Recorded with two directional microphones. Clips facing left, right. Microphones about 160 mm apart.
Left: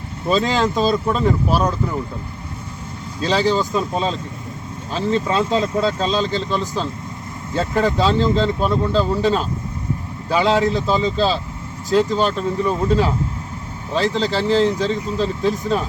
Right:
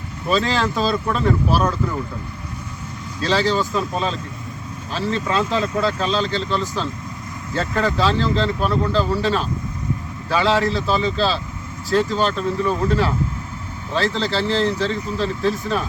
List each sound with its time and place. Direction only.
0.3 s speech: 20° left (ahead or behind)
3.2 s speech: 15° left (ahead or behind)